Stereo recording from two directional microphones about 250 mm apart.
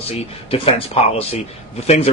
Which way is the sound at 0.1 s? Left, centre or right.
Left.